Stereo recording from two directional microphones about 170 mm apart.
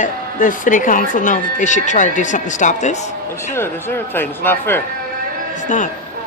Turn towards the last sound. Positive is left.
turn(degrees=45)  # may be behind; listen again after turning